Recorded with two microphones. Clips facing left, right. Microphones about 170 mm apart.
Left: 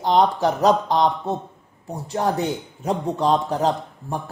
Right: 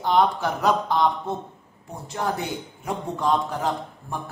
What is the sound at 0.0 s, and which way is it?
Speech, 35° left (ahead or behind).